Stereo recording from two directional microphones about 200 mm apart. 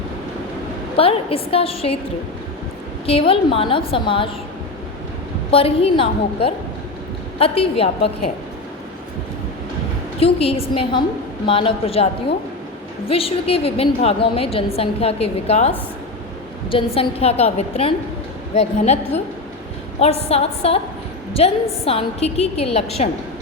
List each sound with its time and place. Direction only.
0.9 s a woman's voice: 30° left (ahead or behind)
3.1 s a woman's voice: 25° left (ahead or behind)
5.5 s a woman's voice: 30° left (ahead or behind)
10.2 s a woman's voice: 30° left (ahead or behind)
13.1 s a woman's voice: 30° left (ahead or behind)